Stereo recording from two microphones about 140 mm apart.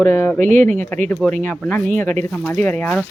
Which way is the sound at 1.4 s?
10° left (ahead or behind).